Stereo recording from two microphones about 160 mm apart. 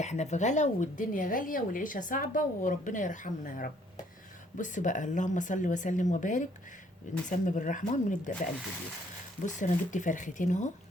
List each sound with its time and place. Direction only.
0.0 s speech: 45° left (ahead or behind)
9.4 s speech: 50° left (ahead or behind)